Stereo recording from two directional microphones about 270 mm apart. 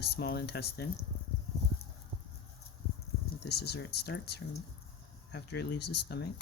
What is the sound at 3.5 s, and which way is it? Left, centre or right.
Speech, left.